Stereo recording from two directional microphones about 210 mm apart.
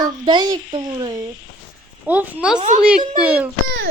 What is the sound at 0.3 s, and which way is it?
Speech, 20° right (ahead or behind).